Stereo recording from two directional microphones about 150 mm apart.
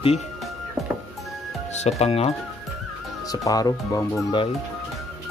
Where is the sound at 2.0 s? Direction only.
45° left (ahead or behind).